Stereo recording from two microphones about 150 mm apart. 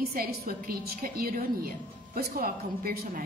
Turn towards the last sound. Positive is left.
turn(degrees=-80)